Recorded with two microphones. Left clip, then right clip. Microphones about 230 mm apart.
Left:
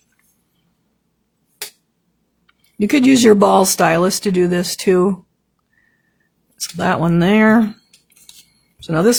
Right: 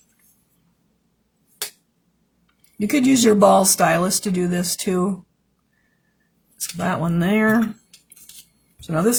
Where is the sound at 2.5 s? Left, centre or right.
Left.